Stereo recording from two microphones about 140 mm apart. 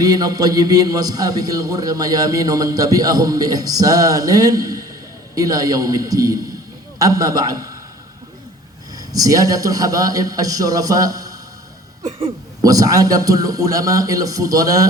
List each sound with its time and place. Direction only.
0.0 s a man's voice: 30° right (ahead or behind)
9.0 s a man's voice: 25° right (ahead or behind)
12.6 s a man's voice: 25° right (ahead or behind)